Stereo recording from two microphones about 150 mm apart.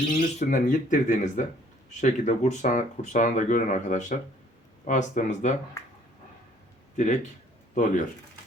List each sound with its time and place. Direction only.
0.1 s speech: 55° left (ahead or behind)
5.8 s a sound: 20° left (ahead or behind)
6.9 s speech: 55° left (ahead or behind)